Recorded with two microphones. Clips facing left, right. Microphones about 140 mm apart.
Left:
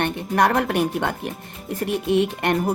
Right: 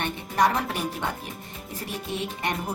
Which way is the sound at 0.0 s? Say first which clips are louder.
Left 4 dB; 60° left (ahead or behind).